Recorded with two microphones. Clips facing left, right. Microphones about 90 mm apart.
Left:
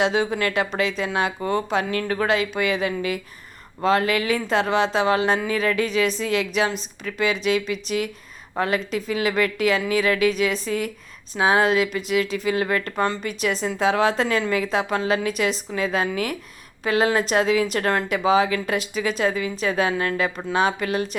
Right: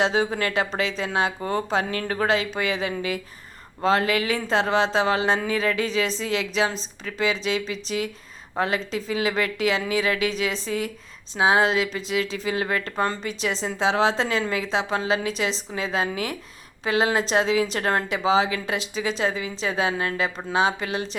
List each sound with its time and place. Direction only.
0.0 s a woman's voice: 35° right (ahead or behind)